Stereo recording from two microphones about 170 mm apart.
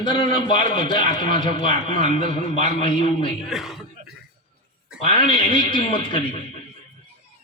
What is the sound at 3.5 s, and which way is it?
Speech, centre (ahead or behind).